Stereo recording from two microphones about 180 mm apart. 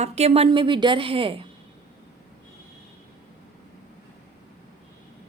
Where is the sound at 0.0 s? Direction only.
35° right (ahead or behind).